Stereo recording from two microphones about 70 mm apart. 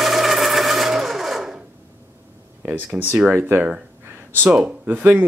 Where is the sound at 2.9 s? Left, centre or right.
Centre.